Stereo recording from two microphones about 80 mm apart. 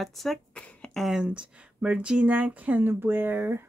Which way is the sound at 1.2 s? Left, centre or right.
Centre.